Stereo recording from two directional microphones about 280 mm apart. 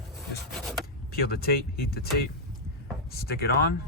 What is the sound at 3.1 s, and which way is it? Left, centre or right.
Speech, left.